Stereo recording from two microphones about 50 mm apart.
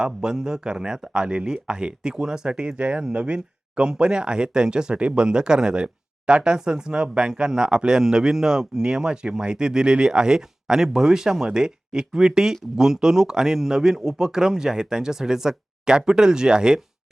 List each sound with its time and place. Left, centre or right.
0.0 s speech: centre